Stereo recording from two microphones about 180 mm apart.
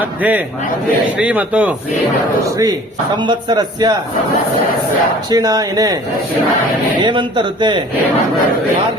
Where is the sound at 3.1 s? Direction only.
25° right (ahead or behind).